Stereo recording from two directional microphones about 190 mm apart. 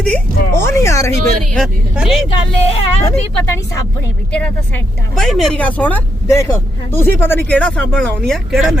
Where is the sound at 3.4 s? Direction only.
15° left (ahead or behind).